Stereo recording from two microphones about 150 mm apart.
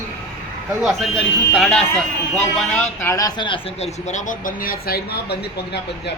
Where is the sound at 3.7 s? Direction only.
45° left (ahead or behind); by 5.4 s 90° left.